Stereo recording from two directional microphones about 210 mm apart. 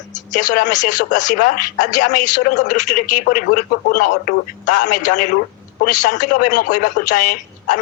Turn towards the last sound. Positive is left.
turn(degrees=40)  # may be behind; listen again after turning